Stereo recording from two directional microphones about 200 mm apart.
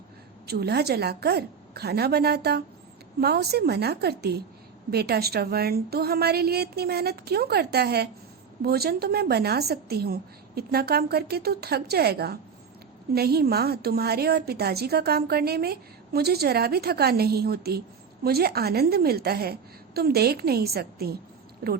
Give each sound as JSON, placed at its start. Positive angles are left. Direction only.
{"t": 0.4, "sound": "a woman's voice", "side_deg": -55}